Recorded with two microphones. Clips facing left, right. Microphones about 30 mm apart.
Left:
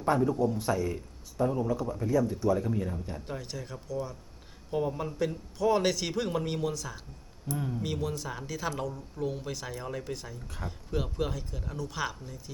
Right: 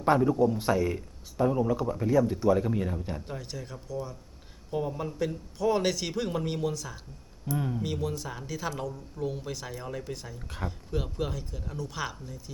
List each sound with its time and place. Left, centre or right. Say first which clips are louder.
0.2 s speech: right 3 dB; centre
0.6 s speech: right 3 dB; right
0.9 s speech: right 1 dB; centre
3.2 s speech: even; centre
7.5 s speech: right 3 dB; centre
7.8 s speech: right 1 dB; centre